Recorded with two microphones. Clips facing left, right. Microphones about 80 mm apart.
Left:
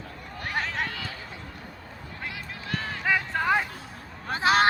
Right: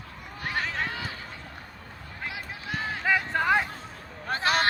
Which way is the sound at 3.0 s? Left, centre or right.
Centre.